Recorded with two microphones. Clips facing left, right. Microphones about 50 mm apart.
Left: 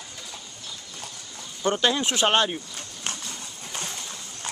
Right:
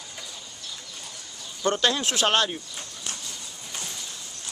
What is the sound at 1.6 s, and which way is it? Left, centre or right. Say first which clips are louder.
Speech: left 1 dB; centre.